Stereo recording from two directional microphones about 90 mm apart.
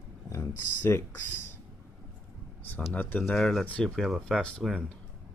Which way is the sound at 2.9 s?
20° left (ahead or behind).